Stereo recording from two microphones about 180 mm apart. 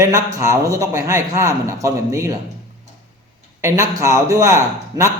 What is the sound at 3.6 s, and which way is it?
Speech, 15° right (ahead or behind).